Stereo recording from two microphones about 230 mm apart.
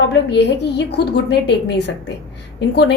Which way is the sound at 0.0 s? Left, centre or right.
Left.